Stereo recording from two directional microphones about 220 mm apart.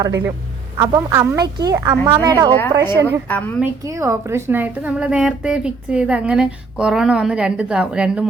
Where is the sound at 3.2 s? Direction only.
5° left (ahead or behind).